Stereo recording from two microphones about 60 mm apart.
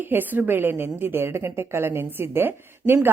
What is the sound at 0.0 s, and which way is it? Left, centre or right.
A woman's voice, right.